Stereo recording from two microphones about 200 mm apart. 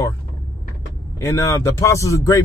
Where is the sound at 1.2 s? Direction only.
15° left (ahead or behind).